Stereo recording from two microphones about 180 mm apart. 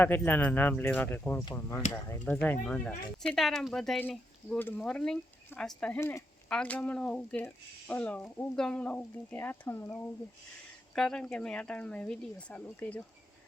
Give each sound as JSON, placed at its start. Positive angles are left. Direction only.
{"t": 0.0, "sound": "speech", "side_deg": 10}
{"t": 6.0, "sound": "speech", "side_deg": 15}